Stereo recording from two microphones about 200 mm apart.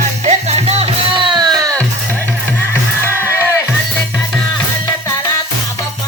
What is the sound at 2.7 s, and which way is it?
Music, 10° left (ahead or behind).